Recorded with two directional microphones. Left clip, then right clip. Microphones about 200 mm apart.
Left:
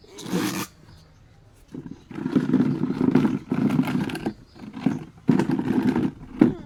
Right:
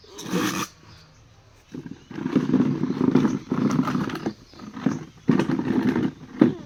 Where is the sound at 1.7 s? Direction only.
5° left (ahead or behind).